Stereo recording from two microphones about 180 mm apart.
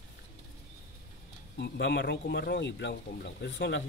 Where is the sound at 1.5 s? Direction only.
70° left (ahead or behind).